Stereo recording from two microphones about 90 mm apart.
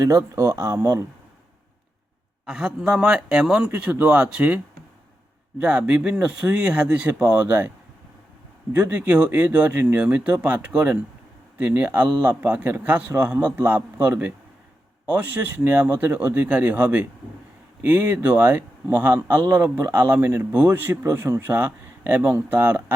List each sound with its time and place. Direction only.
0.0 s speech: 40° right (ahead or behind)
2.5 s a man's voice: 10° right (ahead or behind); by 7.7 s 25° right (ahead or behind)
8.7 s a man's voice: 20° right (ahead or behind)